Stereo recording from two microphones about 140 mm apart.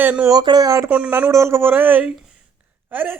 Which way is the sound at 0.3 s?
30° right (ahead or behind).